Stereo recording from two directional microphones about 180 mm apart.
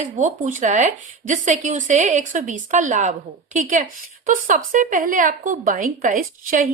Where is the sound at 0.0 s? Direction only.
45° right (ahead or behind).